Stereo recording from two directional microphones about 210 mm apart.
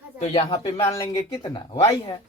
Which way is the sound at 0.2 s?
25° left (ahead or behind).